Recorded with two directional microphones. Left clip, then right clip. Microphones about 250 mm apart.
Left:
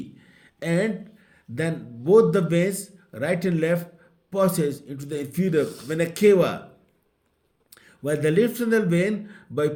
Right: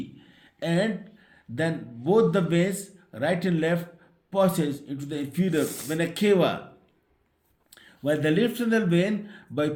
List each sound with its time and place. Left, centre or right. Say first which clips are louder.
0.2 s a man's voice: right 2 dB; left
5.6 s speech: even; centre
5.9 s a man's voice: left 5 dB; left
7.7 s speech: even; left